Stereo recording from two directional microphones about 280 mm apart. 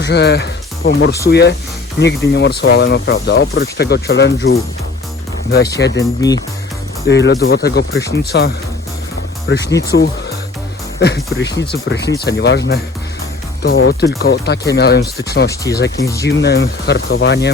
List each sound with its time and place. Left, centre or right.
0.0 s speech: left
5.7 s speech: left
7.1 s speech: left
9.7 s speech: left
15.4 s speech: centre
16.2 s speech: left